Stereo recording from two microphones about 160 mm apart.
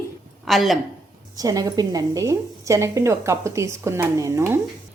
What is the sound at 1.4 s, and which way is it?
A woman's voice, 25° right (ahead or behind).